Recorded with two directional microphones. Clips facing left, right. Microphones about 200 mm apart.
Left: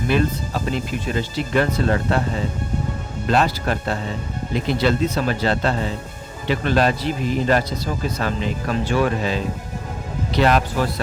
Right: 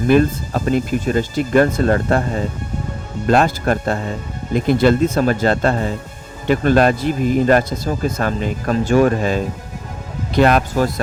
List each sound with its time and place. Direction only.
0.1 s speech: 50° right (ahead or behind)